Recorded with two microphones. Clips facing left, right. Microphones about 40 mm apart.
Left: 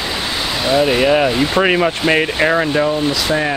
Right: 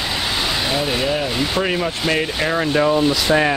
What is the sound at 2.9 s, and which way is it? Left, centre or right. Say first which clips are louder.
Speech: right 1 dB; centre.